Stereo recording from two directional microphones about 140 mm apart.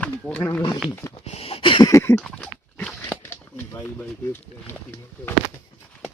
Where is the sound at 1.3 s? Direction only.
45° left (ahead or behind).